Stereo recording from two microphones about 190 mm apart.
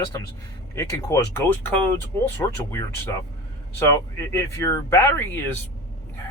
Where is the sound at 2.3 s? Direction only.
15° left (ahead or behind).